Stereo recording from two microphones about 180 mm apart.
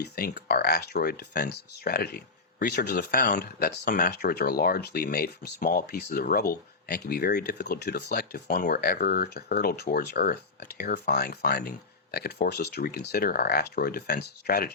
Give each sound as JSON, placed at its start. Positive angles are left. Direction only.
{"t": 0.0, "sound": "speech", "side_deg": 60}